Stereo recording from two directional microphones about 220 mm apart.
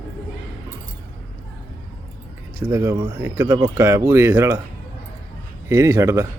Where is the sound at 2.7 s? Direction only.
15° right (ahead or behind).